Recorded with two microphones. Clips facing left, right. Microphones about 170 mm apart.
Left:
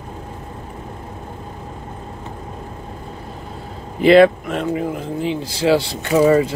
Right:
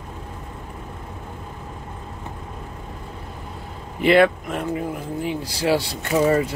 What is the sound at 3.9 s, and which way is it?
A man's voice, 25° left (ahead or behind).